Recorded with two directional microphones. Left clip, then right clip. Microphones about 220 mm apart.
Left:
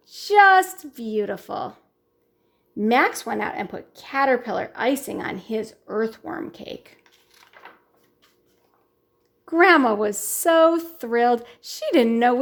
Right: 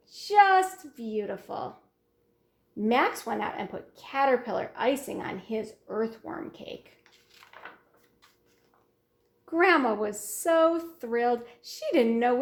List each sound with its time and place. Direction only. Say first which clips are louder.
0.0 s a woman's voice: left 6 dB; 45° left (ahead or behind)
2.7 s speech: left 6 dB; 45° left (ahead or behind)
9.5 s speech: left 7 dB; 40° left (ahead or behind)